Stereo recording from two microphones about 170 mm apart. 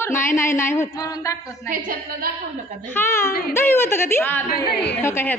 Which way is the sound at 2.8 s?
15° left (ahead or behind).